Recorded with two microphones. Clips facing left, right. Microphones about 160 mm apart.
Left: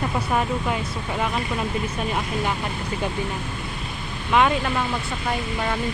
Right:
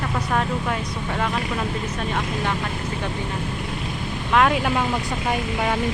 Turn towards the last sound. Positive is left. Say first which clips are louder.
# right 1 dB
turn(degrees=0)  # may be behind; listen again after turning